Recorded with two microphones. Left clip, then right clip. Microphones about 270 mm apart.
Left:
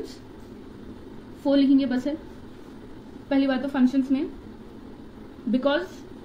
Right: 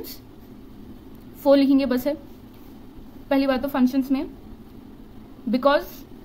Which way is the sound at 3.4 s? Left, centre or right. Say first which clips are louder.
Right 2 dB; centre.